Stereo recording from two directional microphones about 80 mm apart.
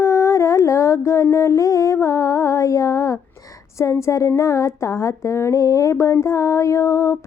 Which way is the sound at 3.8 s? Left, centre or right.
Left.